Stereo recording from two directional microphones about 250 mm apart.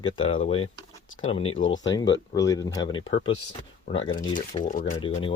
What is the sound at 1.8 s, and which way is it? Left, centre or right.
Speech, centre.